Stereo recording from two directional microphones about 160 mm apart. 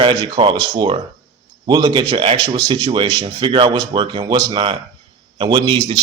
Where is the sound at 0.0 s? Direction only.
30° right (ahead or behind).